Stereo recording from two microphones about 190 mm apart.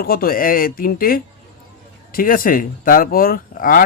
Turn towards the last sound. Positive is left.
turn(degrees=50)  # may be behind; listen again after turning